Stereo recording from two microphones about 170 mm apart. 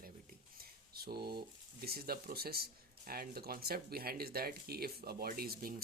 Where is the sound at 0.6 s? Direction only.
65° right (ahead or behind).